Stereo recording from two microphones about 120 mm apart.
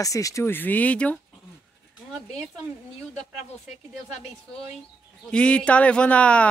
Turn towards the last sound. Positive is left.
turn(degrees=10)  # may be behind; listen again after turning